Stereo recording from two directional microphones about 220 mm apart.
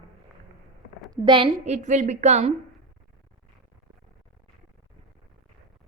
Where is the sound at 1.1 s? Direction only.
20° right (ahead or behind).